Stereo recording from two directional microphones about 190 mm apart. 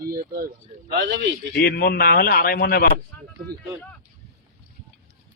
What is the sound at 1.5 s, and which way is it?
A man's voice, 50° left (ahead or behind).